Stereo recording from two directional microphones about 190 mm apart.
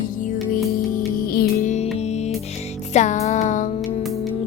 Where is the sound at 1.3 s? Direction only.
55° left (ahead or behind).